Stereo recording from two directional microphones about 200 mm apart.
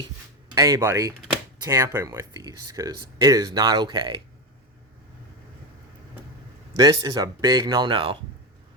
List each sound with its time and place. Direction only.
0.5 s speech: 15° right (ahead or behind)
6.7 s speech: 20° right (ahead or behind)